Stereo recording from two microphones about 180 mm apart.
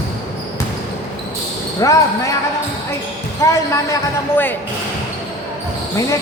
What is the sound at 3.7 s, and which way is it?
Speech, 15° left (ahead or behind).